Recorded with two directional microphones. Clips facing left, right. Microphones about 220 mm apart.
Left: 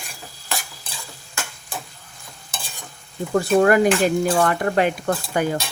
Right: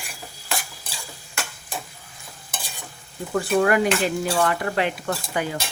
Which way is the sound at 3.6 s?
45° left (ahead or behind).